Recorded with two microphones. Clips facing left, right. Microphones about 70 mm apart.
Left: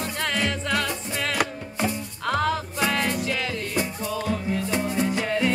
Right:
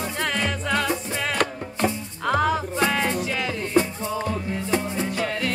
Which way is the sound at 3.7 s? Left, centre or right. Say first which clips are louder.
Right 9 dB; right.